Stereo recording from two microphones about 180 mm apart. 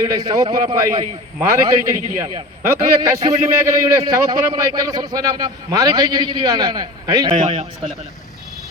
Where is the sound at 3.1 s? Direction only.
15° right (ahead or behind).